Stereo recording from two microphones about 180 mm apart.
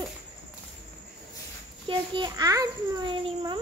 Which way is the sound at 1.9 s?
25° right (ahead or behind).